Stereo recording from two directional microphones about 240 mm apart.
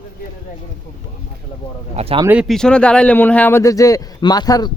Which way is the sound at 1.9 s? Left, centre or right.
Right.